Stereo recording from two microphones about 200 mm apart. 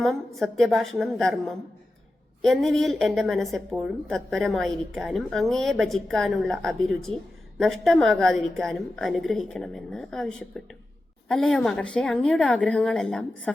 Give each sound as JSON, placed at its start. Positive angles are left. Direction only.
{"t": 0.0, "sound": "a woman's voice", "side_deg": 0}